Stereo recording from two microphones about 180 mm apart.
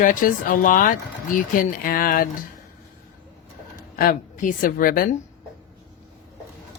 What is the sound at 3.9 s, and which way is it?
A woman's voice, 50° left (ahead or behind).